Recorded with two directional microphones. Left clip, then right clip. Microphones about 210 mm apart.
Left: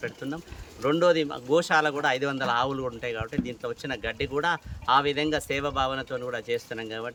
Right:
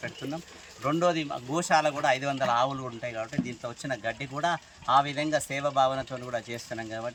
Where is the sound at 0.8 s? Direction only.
20° left (ahead or behind).